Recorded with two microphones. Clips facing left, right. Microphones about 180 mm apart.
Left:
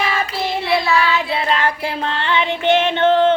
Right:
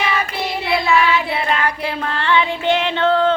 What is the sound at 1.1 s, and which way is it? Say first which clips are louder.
Child singing: even; 25° left (ahead or behind).